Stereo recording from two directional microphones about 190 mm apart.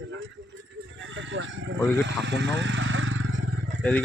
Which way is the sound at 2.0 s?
75° right (ahead or behind).